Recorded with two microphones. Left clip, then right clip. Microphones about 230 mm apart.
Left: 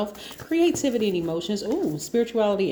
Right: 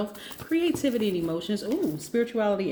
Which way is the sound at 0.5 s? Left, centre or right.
Left.